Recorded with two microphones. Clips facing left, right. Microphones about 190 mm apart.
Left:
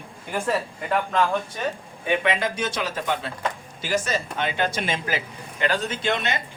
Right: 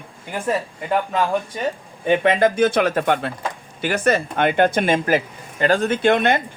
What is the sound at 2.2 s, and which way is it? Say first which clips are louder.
A man's voice: right 9 dB; 50° right (ahead or behind).